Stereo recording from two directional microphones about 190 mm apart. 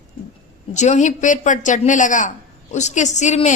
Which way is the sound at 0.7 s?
40° left (ahead or behind).